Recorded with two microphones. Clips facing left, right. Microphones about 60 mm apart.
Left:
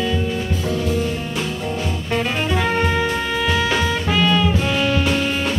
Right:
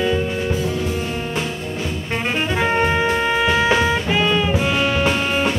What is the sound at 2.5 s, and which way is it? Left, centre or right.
Music, right.